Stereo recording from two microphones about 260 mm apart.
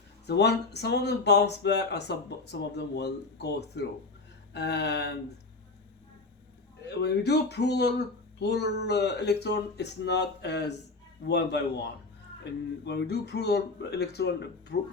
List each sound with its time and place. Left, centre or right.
0.3 s speech: left
6.8 s speech: left